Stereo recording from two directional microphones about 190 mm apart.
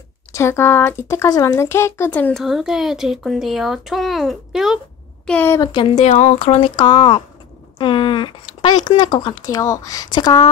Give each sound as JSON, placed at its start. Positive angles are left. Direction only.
{"t": 0.3, "sound": "speech", "side_deg": 15}
{"t": 5.2, "sound": "speech", "side_deg": 10}